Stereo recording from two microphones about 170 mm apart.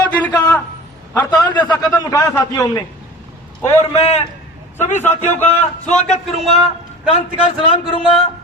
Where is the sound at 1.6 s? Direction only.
20° left (ahead or behind).